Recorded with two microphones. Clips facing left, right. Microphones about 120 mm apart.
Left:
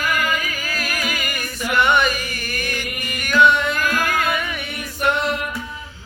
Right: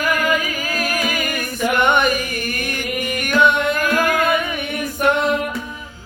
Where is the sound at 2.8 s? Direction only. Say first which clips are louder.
Right 6 dB; 15° right (ahead or behind).